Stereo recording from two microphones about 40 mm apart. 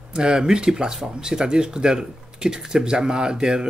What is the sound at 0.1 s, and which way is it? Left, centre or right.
Speech, right.